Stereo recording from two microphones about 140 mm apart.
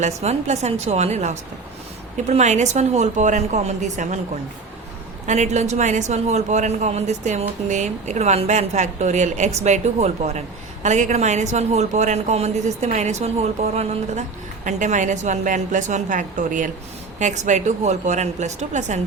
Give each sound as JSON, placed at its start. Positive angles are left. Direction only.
{"t": 0.0, "sound": "a man's voice", "side_deg": -55}
{"t": 5.2, "sound": "a woman's voice", "side_deg": -55}
{"t": 14.6, "sound": "a woman's voice", "side_deg": -60}